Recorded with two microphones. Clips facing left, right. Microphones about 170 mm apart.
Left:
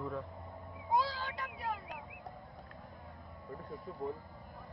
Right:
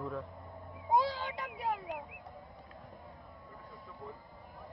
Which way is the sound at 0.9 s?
20° right (ahead or behind).